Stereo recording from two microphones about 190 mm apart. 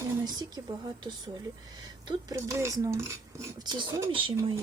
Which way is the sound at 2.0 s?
20° right (ahead or behind).